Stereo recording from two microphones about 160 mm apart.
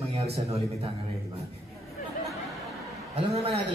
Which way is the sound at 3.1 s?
40° right (ahead or behind).